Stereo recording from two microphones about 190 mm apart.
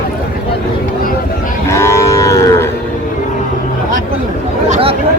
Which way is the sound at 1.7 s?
15° left (ahead or behind).